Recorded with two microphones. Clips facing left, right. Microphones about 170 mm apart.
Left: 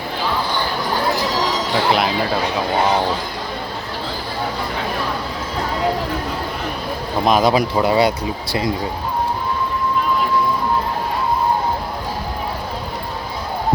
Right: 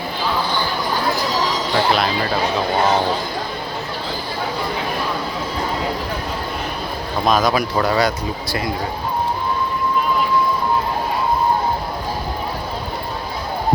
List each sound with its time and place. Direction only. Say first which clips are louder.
1.9 s speech: left 3 dB; 20° left (ahead or behind)
7.3 s speech: left 2 dB; 25° left (ahead or behind)